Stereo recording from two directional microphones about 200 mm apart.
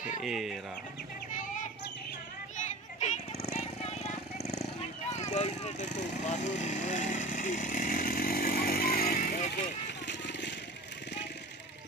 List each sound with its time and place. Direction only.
0.2 s speech: centre (ahead or behind)
2.5 s a sound: 35° left (ahead or behind)
5.1 s vehicle: 35° left (ahead or behind); by 10.5 s 60° left (ahead or behind)